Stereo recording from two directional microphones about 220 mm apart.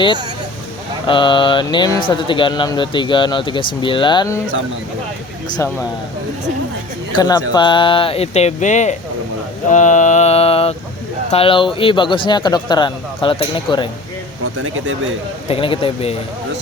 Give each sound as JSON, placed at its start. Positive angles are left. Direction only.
{"t": 1.0, "sound": "speech", "side_deg": 20}
{"t": 7.2, "sound": "speech", "side_deg": 20}
{"t": 9.6, "sound": "a sound", "side_deg": 35}
{"t": 11.3, "sound": "speech", "side_deg": 25}
{"t": 15.4, "sound": "speech", "side_deg": 25}